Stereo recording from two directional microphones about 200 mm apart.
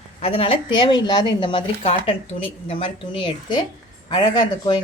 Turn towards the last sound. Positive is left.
turn(degrees=20)  # may be behind; listen again after turning